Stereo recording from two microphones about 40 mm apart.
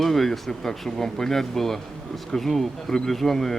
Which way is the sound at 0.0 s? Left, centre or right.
Centre.